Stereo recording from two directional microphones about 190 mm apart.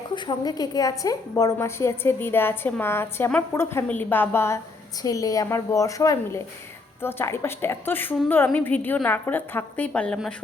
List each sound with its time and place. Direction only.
0.1 s a woman's voice: 20° left (ahead or behind); by 10.3 s 5° left (ahead or behind)